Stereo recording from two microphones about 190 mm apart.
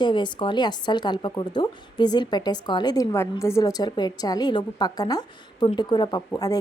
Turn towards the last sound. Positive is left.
turn(degrees=20)  # may be behind; listen again after turning